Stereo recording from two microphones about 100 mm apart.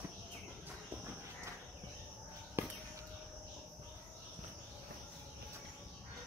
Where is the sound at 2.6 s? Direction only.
25° right (ahead or behind).